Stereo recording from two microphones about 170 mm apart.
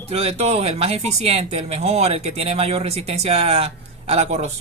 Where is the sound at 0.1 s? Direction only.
35° right (ahead or behind).